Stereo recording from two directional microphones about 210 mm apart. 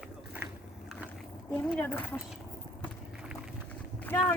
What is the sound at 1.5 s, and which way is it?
Speech, 5° left (ahead or behind).